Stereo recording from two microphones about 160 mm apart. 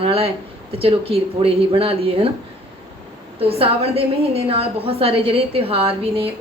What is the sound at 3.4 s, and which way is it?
Speech, 35° right (ahead or behind).